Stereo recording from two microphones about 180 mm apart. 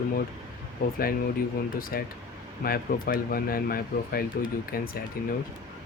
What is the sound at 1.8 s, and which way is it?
Speech, 55° left (ahead or behind).